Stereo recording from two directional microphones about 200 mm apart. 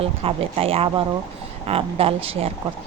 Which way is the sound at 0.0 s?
30° right (ahead or behind).